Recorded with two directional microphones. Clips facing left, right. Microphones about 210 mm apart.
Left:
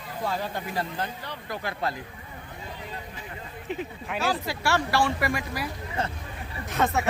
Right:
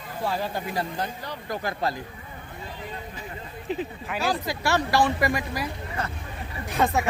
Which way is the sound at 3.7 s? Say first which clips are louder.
Right 3 dB; 35° right (ahead or behind).